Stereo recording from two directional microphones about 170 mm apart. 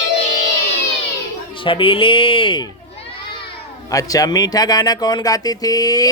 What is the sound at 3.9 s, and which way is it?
Speech, 20° left (ahead or behind).